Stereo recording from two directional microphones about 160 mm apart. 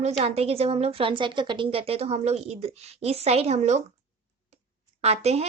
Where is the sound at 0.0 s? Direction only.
40° right (ahead or behind).